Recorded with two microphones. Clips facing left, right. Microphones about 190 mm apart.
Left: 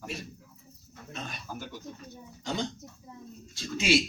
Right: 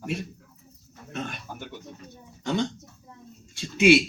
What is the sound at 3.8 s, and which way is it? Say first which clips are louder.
Speech: right 8 dB; 65° right (ahead or behind).